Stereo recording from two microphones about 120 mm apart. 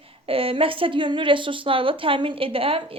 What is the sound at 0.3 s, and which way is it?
A woman's voice, 50° right (ahead or behind).